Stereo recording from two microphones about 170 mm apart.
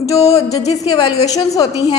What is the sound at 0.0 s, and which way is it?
Music, 20° left (ahead or behind).